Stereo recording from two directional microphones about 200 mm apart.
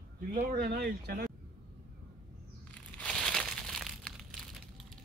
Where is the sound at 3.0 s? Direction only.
5° left (ahead or behind).